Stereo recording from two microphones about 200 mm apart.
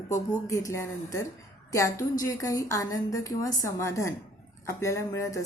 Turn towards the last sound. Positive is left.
turn(degrees=15)  # may be behind; listen again after turning